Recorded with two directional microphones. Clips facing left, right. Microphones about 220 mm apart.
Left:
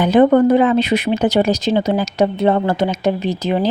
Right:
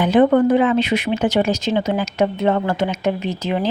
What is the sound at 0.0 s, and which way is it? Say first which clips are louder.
Speech: left 2 dB; 40° left (ahead or behind).